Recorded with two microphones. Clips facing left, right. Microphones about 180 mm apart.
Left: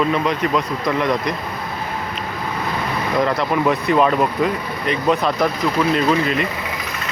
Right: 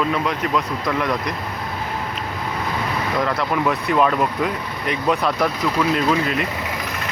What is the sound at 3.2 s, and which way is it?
Speech, 10° left (ahead or behind).